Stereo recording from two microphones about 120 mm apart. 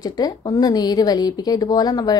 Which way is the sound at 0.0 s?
35° left (ahead or behind).